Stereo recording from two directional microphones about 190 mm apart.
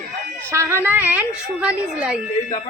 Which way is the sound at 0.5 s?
15° right (ahead or behind).